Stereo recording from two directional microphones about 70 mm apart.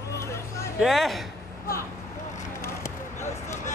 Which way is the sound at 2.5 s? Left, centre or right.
Left.